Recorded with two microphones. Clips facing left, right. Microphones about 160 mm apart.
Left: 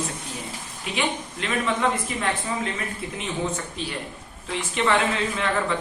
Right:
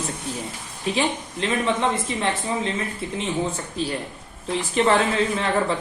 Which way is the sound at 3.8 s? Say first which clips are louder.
Right 5 dB; 40° right (ahead or behind).